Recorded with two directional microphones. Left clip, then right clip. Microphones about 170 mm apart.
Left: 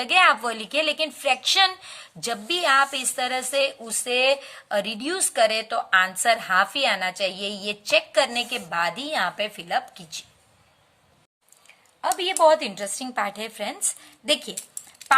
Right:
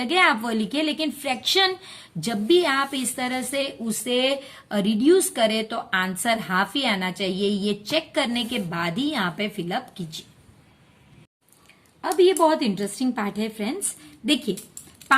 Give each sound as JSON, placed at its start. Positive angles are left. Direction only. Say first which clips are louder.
{"t": 0.0, "sound": "a woman's voice", "louder": "left 2 dB", "side_deg": 25}
{"t": 12.0, "sound": "a woman's voice", "louder": "even", "side_deg": 25}